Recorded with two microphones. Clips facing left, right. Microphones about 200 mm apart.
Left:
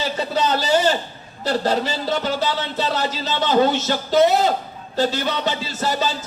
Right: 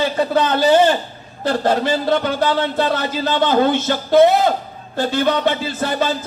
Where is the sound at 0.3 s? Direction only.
55° right (ahead or behind).